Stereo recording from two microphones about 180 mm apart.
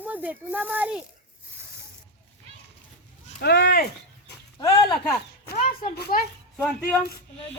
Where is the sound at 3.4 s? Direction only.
65° left (ahead or behind).